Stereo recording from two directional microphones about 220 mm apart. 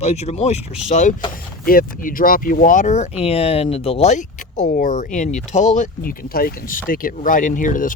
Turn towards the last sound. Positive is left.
turn(degrees=35)  # may be behind; listen again after turning